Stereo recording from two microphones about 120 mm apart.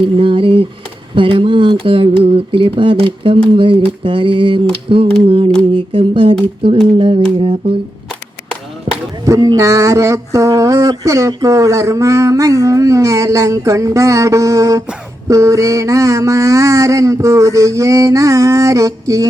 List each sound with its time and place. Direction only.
0.0 s a sound: 45° right (ahead or behind)
8.9 s chop: 60° right (ahead or behind)
9.2 s speech: 30° right (ahead or behind)